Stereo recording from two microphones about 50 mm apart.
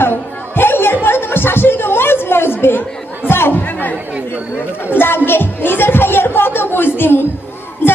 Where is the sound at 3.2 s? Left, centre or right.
Left.